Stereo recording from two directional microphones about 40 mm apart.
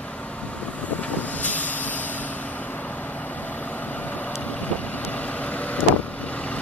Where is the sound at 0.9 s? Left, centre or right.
Left.